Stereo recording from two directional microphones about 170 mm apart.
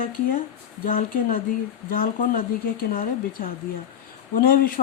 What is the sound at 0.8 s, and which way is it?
Speech, 55° left (ahead or behind).